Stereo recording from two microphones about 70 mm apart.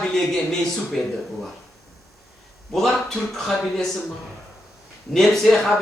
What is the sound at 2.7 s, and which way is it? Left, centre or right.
Speech, centre.